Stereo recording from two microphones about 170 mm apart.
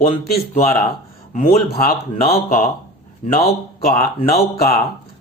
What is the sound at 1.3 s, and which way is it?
Speech, 35° left (ahead or behind).